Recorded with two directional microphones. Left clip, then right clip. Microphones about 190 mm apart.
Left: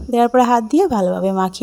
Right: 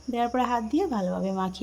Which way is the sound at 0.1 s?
45° left (ahead or behind).